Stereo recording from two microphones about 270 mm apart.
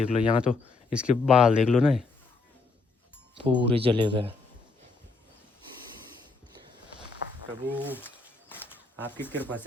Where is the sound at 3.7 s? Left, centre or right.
Centre.